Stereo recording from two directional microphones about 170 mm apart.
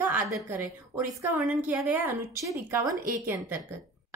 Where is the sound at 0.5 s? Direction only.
10° right (ahead or behind).